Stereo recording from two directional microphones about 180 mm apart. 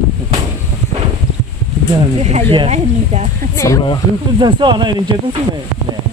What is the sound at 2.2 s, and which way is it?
Speech, 30° right (ahead or behind).